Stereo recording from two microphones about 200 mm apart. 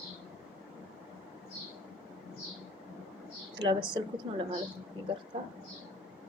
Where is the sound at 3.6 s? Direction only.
25° right (ahead or behind).